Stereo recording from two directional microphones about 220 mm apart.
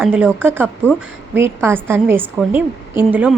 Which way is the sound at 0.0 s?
5° right (ahead or behind).